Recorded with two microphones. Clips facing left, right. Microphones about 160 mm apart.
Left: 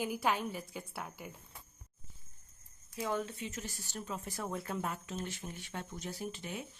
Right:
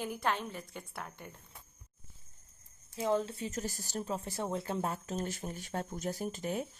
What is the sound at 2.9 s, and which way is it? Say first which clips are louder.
Speech: right 5 dB; 30° right (ahead or behind).